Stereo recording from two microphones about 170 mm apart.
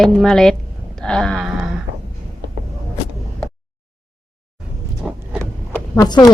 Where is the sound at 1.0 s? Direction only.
5° left (ahead or behind).